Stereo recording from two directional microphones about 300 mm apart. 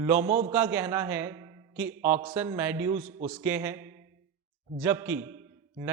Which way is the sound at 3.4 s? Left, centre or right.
Centre.